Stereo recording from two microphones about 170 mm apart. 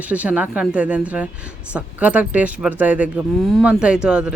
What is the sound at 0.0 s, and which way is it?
Speech, 10° right (ahead or behind).